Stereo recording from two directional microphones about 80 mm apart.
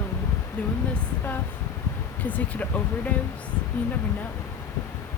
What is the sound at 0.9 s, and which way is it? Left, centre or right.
Speech, left.